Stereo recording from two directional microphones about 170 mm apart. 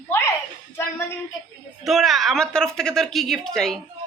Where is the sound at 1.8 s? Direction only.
Centre (ahead or behind).